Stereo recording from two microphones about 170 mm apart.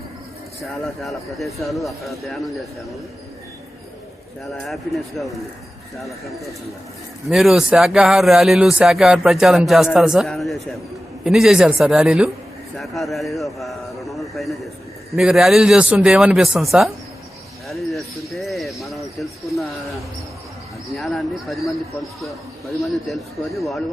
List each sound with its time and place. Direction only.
0.6 s speech: centre (ahead or behind)
4.5 s speech: centre (ahead or behind)
7.3 s a man's voice: centre (ahead or behind)
17.7 s jingle bell: centre (ahead or behind)
20.9 s speech: centre (ahead or behind)
22.9 s speech: centre (ahead or behind)